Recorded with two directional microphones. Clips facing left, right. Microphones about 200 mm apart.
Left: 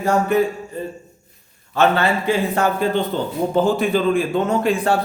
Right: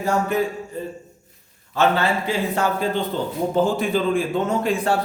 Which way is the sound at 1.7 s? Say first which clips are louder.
Left 2 dB; 60° left (ahead or behind).